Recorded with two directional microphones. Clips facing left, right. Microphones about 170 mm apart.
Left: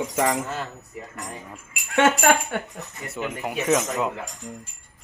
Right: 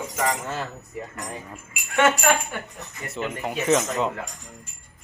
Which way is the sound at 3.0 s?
5° left (ahead or behind).